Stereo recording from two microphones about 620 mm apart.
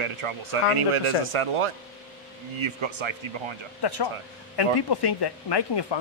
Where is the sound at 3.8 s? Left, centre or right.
Left.